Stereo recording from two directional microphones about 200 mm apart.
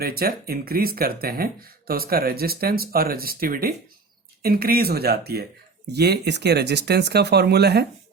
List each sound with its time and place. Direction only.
0.0 s speech: 50° right (ahead or behind)